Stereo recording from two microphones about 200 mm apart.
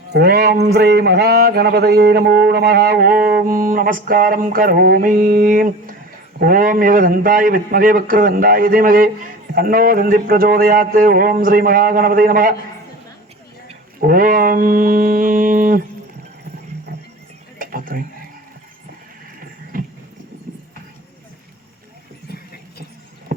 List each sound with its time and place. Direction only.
0.1 s a man's voice: 50° right (ahead or behind)
14.0 s a man's voice: 45° right (ahead or behind)
17.6 s a sound: 45° right (ahead or behind)